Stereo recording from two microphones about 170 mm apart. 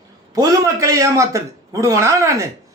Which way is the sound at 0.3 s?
20° right (ahead or behind).